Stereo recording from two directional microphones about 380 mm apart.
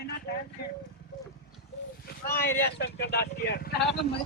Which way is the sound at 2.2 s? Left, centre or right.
Left.